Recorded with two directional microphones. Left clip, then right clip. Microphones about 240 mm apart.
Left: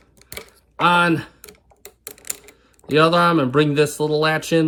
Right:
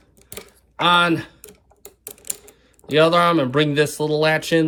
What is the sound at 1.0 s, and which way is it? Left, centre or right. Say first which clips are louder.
Speech: even; centre.